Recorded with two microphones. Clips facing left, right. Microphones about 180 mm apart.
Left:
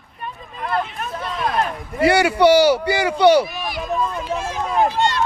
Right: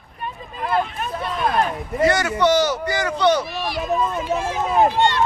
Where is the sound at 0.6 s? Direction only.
5° right (ahead or behind).